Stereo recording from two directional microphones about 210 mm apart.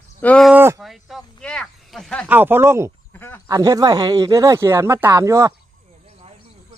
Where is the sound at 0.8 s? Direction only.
Centre (ahead or behind).